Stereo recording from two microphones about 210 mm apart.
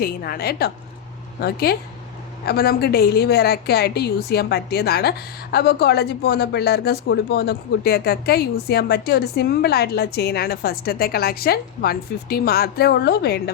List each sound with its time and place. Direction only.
0.0 s a woman's voice: 45° left (ahead or behind)